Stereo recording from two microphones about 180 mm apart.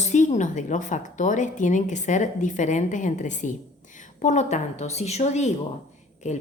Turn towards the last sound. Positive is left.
turn(degrees=40)  # may be behind; listen again after turning